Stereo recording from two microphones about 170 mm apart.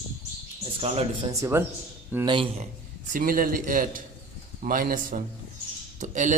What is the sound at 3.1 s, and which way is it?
A man's voice, 55° right (ahead or behind).